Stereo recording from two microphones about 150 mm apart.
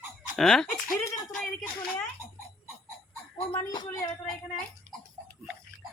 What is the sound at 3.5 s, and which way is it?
Speech, 30° left (ahead or behind).